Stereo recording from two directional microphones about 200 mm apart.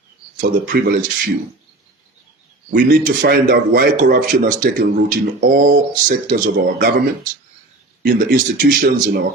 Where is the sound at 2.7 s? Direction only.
50° right (ahead or behind).